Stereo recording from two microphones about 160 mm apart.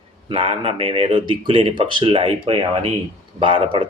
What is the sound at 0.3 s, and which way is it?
Speech, 35° right (ahead or behind).